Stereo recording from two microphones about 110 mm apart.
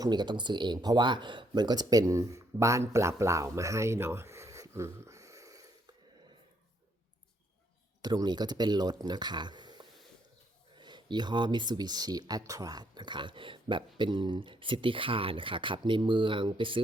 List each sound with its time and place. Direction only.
0.0 s speech: 40° right (ahead or behind)
8.0 s speech: 40° right (ahead or behind)